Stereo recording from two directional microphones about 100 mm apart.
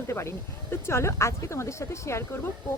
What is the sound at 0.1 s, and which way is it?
Speech, 25° left (ahead or behind).